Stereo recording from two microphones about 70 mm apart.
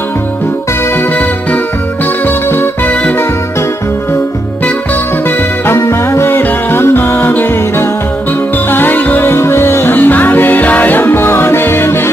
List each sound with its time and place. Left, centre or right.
2.2 s music: left
5.7 s music: left
8.6 s music: left